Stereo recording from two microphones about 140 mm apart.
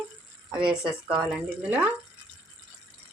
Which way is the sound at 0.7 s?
5° right (ahead or behind).